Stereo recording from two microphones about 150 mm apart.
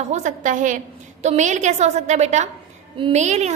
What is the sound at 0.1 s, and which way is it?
A woman's voice, 55° right (ahead or behind).